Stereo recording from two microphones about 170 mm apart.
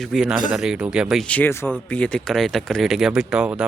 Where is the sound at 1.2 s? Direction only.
10° left (ahead or behind).